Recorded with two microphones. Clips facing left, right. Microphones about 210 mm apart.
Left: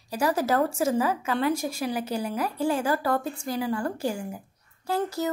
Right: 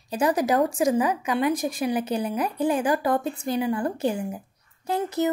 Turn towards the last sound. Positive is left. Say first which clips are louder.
# right 3 dB
turn(degrees=-20)  # may be behind; listen again after turning